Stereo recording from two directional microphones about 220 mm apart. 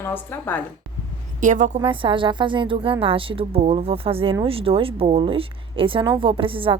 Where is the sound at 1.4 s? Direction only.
35° right (ahead or behind).